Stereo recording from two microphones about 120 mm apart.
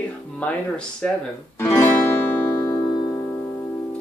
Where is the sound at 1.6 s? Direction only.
25° left (ahead or behind).